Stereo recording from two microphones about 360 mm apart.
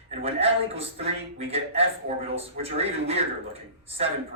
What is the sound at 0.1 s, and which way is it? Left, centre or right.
Speech, centre.